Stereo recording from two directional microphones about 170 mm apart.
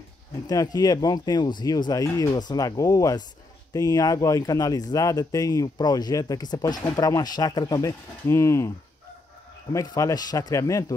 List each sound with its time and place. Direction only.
0.5 s speech: 20° left (ahead or behind)